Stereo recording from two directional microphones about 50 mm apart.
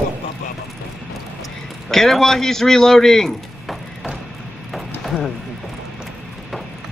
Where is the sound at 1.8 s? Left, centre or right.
Centre.